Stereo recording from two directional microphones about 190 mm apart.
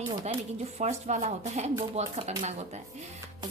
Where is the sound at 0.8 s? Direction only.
35° right (ahead or behind).